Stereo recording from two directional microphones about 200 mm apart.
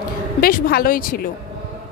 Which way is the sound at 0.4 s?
45° left (ahead or behind).